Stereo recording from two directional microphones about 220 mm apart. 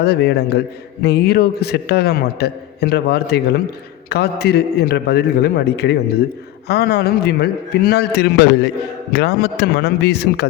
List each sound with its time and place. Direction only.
0.0 s a man's voice: 50° left (ahead or behind)